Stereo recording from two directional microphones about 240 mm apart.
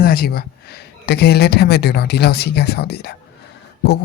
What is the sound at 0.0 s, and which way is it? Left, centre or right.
Speech, left.